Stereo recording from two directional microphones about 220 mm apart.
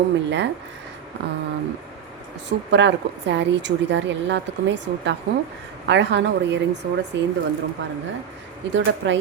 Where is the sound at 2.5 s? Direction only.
55° right (ahead or behind).